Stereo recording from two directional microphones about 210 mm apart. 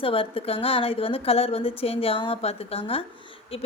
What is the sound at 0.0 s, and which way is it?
A woman's voice, 25° left (ahead or behind).